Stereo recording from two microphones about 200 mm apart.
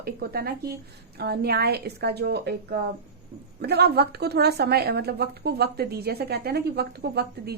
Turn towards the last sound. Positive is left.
turn(degrees=-55)  # may be behind; listen again after turning